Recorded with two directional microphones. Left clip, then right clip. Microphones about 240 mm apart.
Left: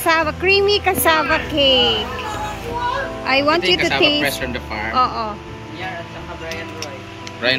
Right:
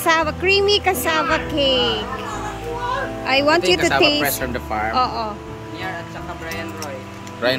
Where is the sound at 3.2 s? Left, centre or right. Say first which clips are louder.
Even; centre.